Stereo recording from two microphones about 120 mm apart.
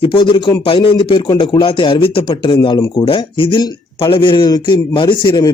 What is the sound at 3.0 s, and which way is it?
A man's voice, 45° left (ahead or behind).